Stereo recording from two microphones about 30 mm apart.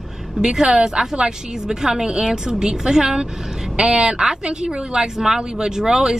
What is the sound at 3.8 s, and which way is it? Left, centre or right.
Speech, right.